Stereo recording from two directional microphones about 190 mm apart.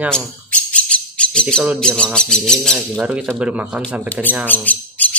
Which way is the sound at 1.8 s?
5° left (ahead or behind).